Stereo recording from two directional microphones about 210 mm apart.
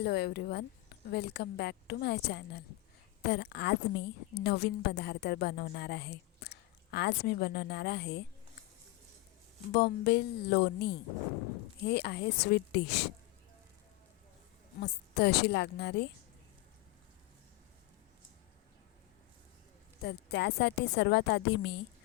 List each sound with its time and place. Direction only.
0.0 s a woman's voice: 50° left (ahead or behind)
9.7 s a woman's voice: 50° left (ahead or behind)
14.8 s a woman's voice: 50° left (ahead or behind)
20.0 s a woman's voice: 50° left (ahead or behind)